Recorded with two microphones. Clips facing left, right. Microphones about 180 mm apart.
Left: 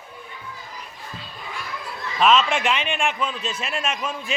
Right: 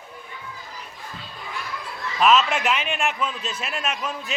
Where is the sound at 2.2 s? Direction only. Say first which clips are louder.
Even; 5° right (ahead or behind).